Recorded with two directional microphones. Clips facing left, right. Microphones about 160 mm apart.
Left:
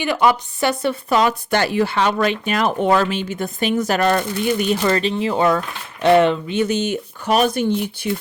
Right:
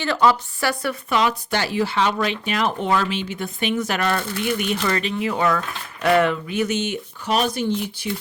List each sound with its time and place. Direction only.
0.0 s speech: 15° left (ahead or behind)
1.1 s speech: 45° left (ahead or behind)